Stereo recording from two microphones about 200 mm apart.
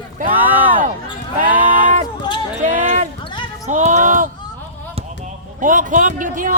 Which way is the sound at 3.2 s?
25° left (ahead or behind).